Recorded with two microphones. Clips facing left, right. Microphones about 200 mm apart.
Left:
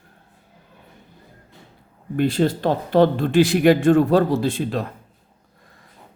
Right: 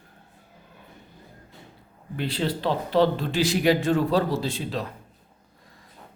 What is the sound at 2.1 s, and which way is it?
Speech, 50° left (ahead or behind).